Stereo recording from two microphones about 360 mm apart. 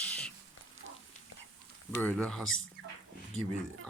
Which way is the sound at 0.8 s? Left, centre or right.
Right.